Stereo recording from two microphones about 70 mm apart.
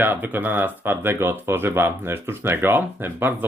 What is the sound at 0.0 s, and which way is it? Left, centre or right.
Speech, right.